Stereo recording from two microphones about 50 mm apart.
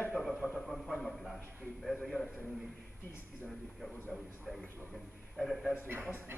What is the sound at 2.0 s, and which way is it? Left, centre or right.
Speech, centre.